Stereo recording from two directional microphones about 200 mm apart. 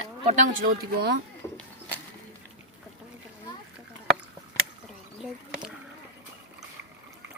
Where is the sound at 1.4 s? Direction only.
15° left (ahead or behind).